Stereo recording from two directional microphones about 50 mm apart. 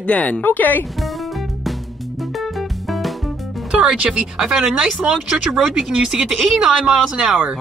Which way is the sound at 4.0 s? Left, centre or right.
Right.